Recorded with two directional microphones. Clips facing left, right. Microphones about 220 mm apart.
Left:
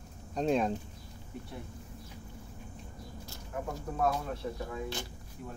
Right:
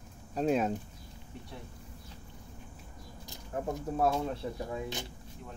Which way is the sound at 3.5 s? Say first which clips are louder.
Right 3 dB; 30° right (ahead or behind).